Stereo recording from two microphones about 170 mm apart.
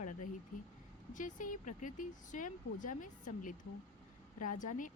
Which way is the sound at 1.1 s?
50° left (ahead or behind).